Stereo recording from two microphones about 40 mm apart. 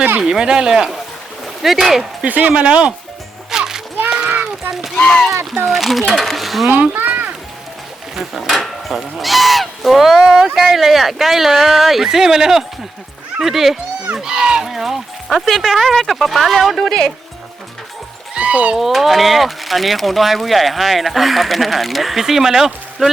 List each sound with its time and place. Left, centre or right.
0.2 s speech: centre
2.2 s speech: right
3.5 s music: centre
4.1 s a sound: centre
4.9 s speech: centre
5.6 s speech: centre
6.9 s a sound: right
8.1 s speech: centre
14.2 s speech: centre
14.7 s speech: centre
16.7 s speech: centre
18.3 s a sound: right
18.9 s speech: centre